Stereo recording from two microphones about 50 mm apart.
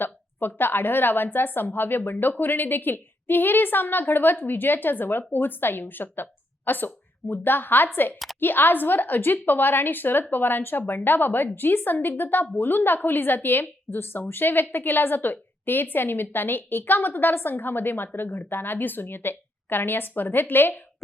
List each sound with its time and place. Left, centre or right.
0.0 s a woman's voice: left